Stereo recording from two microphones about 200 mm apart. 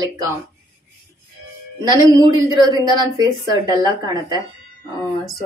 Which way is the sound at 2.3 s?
20° right (ahead or behind).